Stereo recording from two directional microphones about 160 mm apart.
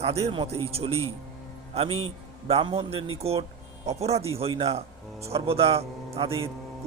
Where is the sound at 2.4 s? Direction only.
35° right (ahead or behind).